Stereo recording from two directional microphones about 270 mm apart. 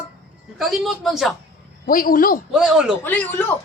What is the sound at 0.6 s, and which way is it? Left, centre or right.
Speech, centre.